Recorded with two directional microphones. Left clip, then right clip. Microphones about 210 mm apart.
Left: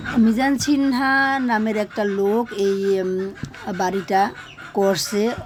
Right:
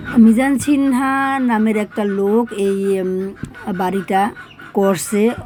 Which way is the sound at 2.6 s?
20° right (ahead or behind).